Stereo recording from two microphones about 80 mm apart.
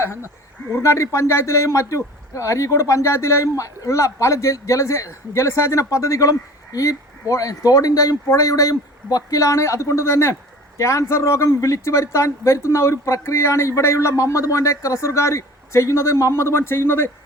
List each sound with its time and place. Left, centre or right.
0.0 s speech: left